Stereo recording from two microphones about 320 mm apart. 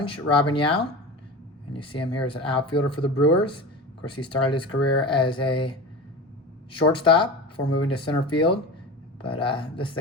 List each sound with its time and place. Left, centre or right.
0.0 s speech: centre